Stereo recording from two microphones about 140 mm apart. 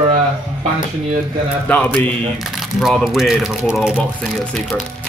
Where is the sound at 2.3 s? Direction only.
Centre (ahead or behind).